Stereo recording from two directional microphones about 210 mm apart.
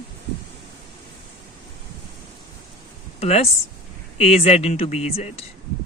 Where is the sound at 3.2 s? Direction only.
30° left (ahead or behind).